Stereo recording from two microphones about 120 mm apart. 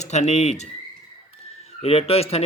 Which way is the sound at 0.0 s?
70° left (ahead or behind).